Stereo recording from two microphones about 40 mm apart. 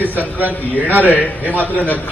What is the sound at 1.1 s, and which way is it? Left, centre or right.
Speech, left.